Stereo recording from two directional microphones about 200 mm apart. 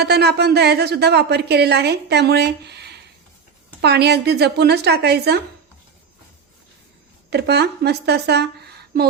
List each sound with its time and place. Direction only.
0.0 s a woman's voice: 55° right (ahead or behind)
7.3 s a woman's voice: 55° right (ahead or behind)